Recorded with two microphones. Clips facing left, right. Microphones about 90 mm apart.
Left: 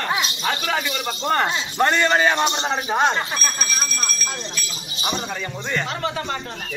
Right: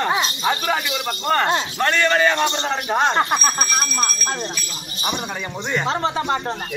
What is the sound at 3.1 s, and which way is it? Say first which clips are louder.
Speech: right 5 dB; 60° right (ahead or behind).